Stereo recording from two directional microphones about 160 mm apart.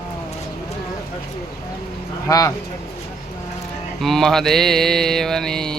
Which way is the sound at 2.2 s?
20° left (ahead or behind).